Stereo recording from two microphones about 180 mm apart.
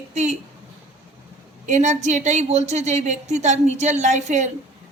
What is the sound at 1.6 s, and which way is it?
A woman's voice, 40° right (ahead or behind).